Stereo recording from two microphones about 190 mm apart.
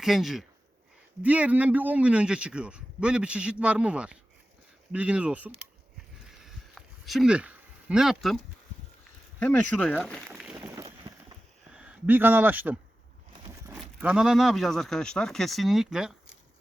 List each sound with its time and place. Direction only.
0.0 s a man's voice: centre (ahead or behind)
6.3 s a sound: centre (ahead or behind)
9.4 s speech: 5° left (ahead or behind); by 10.8 s 15° right (ahead or behind)
10.8 s a sound: 25° right (ahead or behind)
11.7 s speech: 5° right (ahead or behind)
14.0 s a man's voice: 5° right (ahead or behind)